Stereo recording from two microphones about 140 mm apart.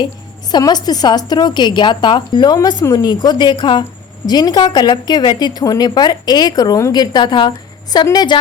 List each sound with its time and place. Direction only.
0.5 s a woman's voice: 30° left (ahead or behind)